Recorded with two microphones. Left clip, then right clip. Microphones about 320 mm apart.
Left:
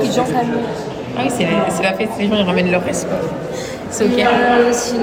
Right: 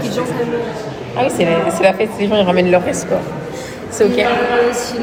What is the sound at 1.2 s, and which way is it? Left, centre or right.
A woman's voice, centre.